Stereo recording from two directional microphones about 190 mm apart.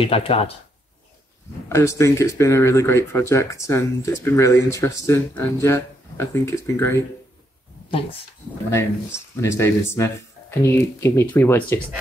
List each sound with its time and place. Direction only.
0.0 s speech: 30° left (ahead or behind)
1.7 s speech: 15° left (ahead or behind)
9.4 s speech: 15° left (ahead or behind)